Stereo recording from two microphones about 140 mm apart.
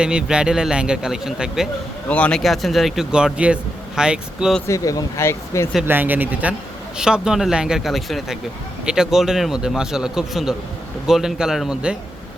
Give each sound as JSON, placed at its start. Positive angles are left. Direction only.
{"t": 0.0, "sound": "speech", "side_deg": -5}
{"t": 2.0, "sound": "speech", "side_deg": 10}
{"t": 4.6, "sound": "speech", "side_deg": 25}
{"t": 5.8, "sound": "speech", "side_deg": -15}